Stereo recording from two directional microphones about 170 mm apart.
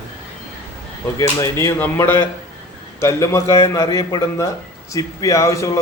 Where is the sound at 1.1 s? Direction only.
20° left (ahead or behind).